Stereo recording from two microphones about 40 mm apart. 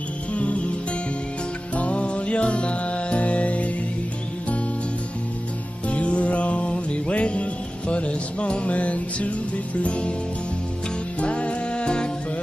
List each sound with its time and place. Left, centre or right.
0.3 s music: left
1.8 s music: left
5.9 s music: left
11.1 s music: left